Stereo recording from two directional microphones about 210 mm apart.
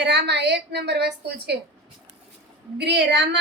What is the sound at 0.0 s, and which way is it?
A woman's voice, 55° right (ahead or behind).